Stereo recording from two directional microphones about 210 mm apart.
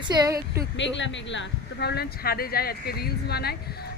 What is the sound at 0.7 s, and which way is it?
Speech, 60° left (ahead or behind).